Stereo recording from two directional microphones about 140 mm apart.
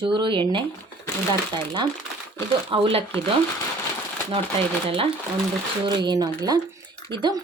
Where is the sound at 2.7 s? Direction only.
40° right (ahead or behind).